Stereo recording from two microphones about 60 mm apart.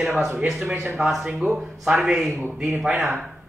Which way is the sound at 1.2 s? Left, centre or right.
Centre.